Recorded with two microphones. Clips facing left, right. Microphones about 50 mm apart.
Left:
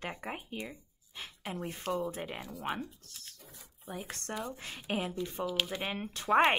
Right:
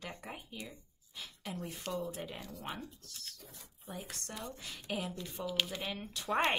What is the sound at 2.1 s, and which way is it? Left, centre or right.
Speech, left.